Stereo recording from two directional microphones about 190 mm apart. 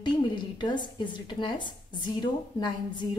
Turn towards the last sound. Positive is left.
turn(degrees=25)  # may be behind; listen again after turning